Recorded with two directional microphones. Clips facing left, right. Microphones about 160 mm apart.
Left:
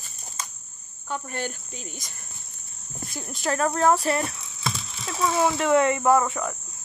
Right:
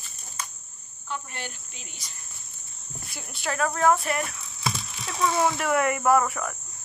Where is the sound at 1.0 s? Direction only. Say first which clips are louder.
Left 5 dB; 45° left (ahead or behind).